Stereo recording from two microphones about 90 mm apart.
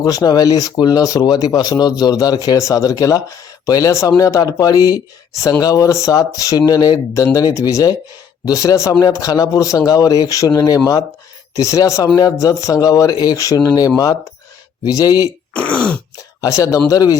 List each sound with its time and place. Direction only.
0.0 s speech: 50° left (ahead or behind)
15.5 s throat clearing: 15° left (ahead or behind)
16.4 s speech: 35° left (ahead or behind)